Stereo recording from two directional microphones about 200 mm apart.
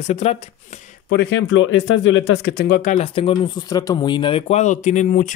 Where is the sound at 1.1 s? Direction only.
60° left (ahead or behind).